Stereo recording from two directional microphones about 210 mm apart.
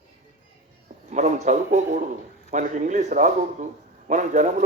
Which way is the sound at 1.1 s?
35° right (ahead or behind).